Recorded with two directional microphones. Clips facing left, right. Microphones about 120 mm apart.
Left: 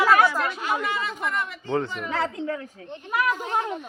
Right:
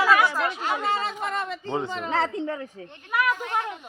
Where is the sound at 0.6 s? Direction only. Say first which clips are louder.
Right 1 dB; 30° right (ahead or behind).